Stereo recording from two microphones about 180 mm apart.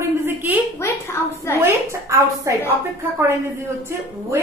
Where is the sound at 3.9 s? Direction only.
15° right (ahead or behind).